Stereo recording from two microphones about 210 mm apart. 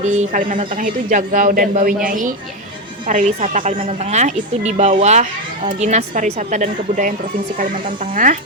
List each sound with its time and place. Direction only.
0.0 s a woman's voice: 35° right (ahead or behind)
8.1 s a woman's voice: 40° right (ahead or behind)